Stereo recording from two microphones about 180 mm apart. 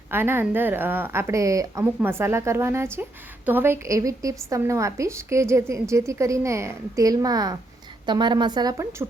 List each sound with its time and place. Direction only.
0.1 s a woman's voice: 10° right (ahead or behind)